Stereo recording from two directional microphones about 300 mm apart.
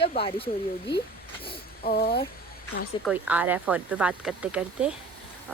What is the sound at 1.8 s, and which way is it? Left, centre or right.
Speech, left.